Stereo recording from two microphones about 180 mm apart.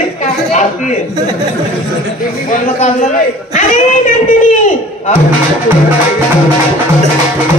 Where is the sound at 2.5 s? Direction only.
45° left (ahead or behind).